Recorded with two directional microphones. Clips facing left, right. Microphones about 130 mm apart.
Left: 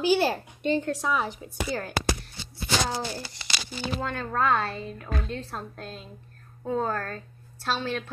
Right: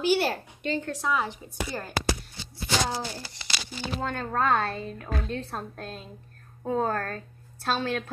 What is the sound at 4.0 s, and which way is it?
A woman's voice, 30° right (ahead or behind).